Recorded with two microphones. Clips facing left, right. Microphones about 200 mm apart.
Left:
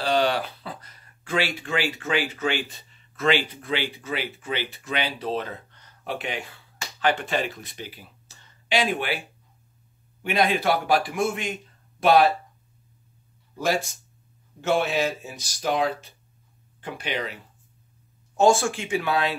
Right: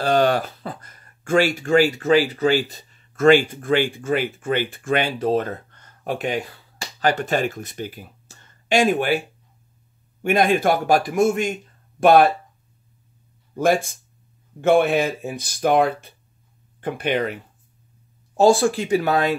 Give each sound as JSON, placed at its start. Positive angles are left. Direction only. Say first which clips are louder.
{"t": 0.0, "sound": "speech", "louder": "right 5 dB", "side_deg": -50}
{"t": 10.2, "sound": "a man's voice", "louder": "right 5 dB", "side_deg": -50}
{"t": 13.6, "sound": "a man's voice", "louder": "right 6 dB", "side_deg": -50}
{"t": 18.3, "sound": "speech", "louder": "right 4 dB", "side_deg": -35}